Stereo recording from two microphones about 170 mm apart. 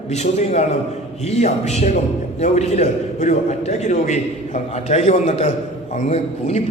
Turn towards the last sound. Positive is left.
turn(degrees=40)  # may be behind; listen again after turning